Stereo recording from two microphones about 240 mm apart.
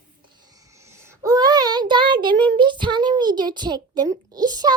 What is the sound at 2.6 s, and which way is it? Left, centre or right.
A child's voice, centre.